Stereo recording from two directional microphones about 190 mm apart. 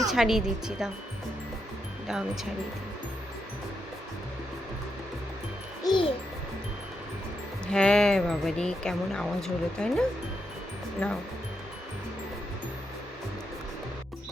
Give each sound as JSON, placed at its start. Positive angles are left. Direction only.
{"t": 0.1, "sound": "speech", "side_deg": 0}
{"t": 2.0, "sound": "speech", "side_deg": 0}
{"t": 5.8, "sound": "a child's voice", "side_deg": 25}
{"t": 7.7, "sound": "speech", "side_deg": 5}